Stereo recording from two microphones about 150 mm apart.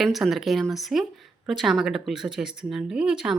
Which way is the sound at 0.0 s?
Centre (ahead or behind).